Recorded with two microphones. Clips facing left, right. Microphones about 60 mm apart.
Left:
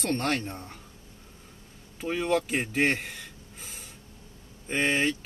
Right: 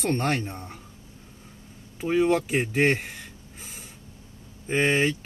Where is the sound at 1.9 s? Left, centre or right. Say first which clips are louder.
Right 5 dB; centre.